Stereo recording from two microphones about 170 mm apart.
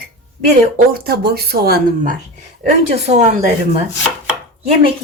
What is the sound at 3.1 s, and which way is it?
Speech, 35° right (ahead or behind).